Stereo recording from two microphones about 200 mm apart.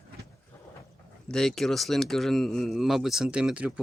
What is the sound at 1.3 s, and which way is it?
Speech, centre (ahead or behind).